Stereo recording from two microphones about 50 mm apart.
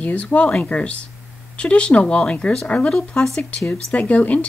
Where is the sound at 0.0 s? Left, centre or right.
Left.